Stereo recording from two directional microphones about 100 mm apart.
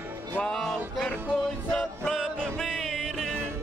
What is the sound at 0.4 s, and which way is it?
Music, 5° left (ahead or behind).